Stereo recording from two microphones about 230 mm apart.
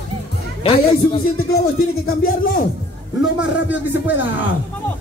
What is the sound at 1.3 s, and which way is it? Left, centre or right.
Speech, left.